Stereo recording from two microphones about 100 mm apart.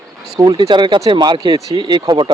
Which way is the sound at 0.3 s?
40° right (ahead or behind).